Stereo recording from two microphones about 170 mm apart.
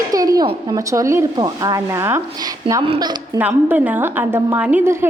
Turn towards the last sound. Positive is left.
turn(degrees=-10)  # may be behind; listen again after turning